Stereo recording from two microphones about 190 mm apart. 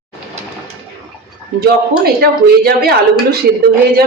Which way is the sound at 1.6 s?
55° right (ahead or behind).